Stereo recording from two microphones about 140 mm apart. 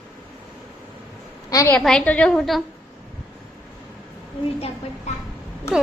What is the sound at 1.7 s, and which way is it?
Speech, 5° left (ahead or behind).